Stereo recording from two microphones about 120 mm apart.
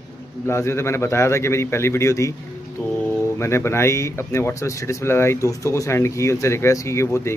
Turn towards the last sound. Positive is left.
turn(degrees=25)  # may be behind; listen again after turning